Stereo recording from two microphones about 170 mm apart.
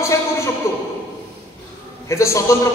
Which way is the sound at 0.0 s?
15° left (ahead or behind).